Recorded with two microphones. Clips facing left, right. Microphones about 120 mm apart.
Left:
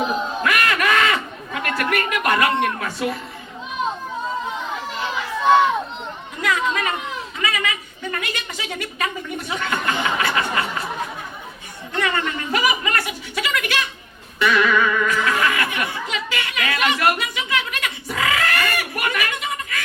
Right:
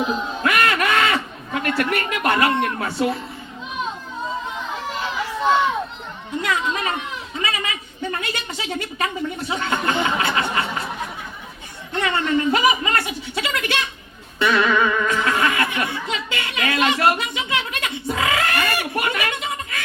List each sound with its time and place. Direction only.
0.4 s a sound: 30° right (ahead or behind)
1.9 s a woman's voice: 30° right (ahead or behind)
6.4 s a woman's voice: 30° right (ahead or behind)
11.9 s a woman's voice: 30° right (ahead or behind)
14.3 s music: 30° right (ahead or behind)